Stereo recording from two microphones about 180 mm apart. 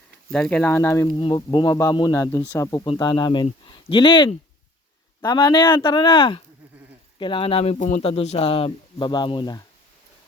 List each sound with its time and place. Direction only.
0.3 s speech: 5° left (ahead or behind); by 9.6 s 25° left (ahead or behind)